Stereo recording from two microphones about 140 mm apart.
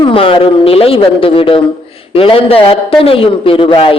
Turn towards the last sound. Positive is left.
turn(degrees=40)  # may be behind; listen again after turning